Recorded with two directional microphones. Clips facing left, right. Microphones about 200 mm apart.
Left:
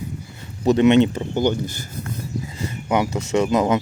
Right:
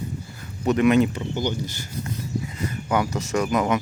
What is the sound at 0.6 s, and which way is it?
Speech, 30° left (ahead or behind).